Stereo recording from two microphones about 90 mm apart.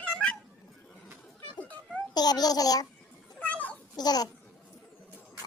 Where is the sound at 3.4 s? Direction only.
15° left (ahead or behind).